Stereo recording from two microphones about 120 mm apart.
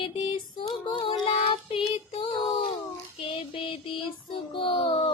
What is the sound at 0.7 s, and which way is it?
Child singing, 40° left (ahead or behind).